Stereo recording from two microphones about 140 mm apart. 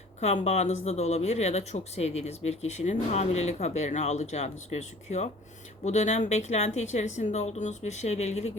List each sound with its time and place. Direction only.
0.2 s speech: 50° left (ahead or behind)